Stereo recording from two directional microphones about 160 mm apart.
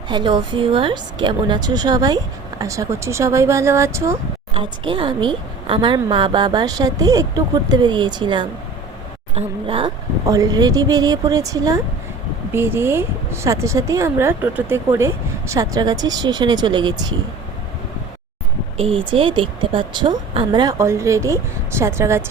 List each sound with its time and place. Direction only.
0.1 s a woman's voice: 30° right (ahead or behind)
4.5 s a woman's voice: 30° right (ahead or behind)
10.2 s a woman's voice: 20° right (ahead or behind)
18.8 s a woman's voice: 35° right (ahead or behind); by 22.2 s 15° right (ahead or behind)